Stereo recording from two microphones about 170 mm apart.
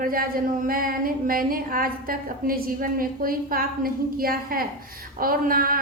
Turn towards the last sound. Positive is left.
turn(degrees=-55)  # may be behind; listen again after turning